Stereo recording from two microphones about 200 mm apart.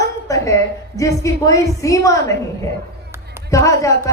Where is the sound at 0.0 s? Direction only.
15° left (ahead or behind).